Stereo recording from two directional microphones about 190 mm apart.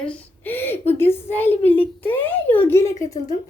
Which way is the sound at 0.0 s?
10° left (ahead or behind).